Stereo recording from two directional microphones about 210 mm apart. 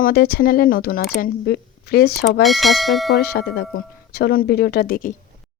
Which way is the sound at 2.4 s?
Centre (ahead or behind).